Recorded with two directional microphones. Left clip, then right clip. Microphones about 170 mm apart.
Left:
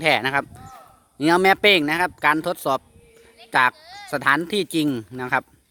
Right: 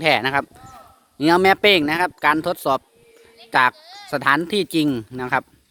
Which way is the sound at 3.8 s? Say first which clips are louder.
Even; 25° left (ahead or behind).